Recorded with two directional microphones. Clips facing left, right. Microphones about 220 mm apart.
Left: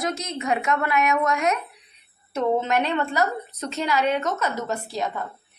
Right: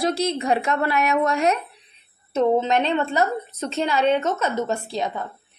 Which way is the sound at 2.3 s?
20° right (ahead or behind).